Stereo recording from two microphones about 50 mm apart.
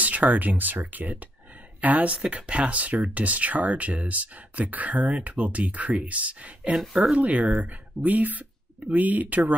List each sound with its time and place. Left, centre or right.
0.0 s speech: right
7.2 s speech: right